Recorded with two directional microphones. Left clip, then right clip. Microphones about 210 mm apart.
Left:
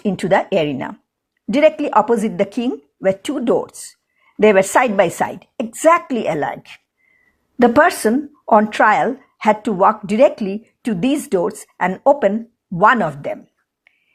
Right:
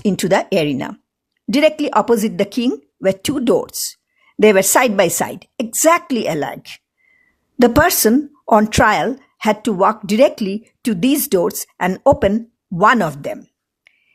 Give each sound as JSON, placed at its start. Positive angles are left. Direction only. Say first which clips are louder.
{"t": 0.0, "sound": "speech", "louder": "even", "side_deg": -35}